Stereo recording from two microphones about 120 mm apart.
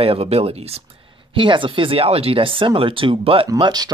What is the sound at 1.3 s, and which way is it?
Speech, 45° right (ahead or behind).